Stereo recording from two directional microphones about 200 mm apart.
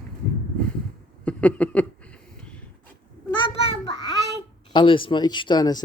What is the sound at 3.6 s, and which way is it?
Child singing, 25° left (ahead or behind).